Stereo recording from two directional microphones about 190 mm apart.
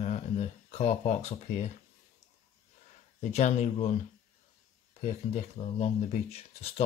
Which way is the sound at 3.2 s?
35° left (ahead or behind).